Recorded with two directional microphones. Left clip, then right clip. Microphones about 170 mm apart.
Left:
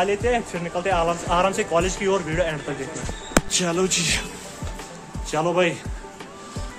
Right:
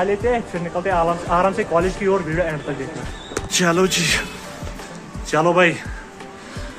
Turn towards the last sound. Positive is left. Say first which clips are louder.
# right 6 dB
turn(degrees=5)  # may be behind; listen again after turning